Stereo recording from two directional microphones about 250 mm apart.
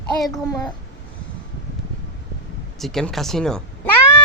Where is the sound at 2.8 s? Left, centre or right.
Centre.